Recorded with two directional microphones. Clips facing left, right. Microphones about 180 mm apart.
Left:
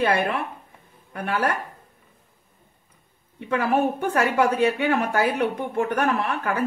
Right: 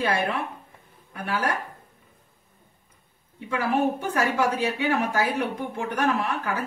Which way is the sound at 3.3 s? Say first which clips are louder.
Left 3 dB; 60° left (ahead or behind).